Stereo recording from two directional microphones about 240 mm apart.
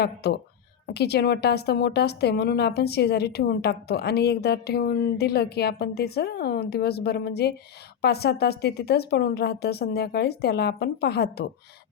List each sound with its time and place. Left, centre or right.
0.0 s a woman's voice: left